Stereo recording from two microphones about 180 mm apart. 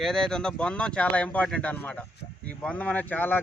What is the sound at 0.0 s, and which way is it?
A man's voice, centre (ahead or behind).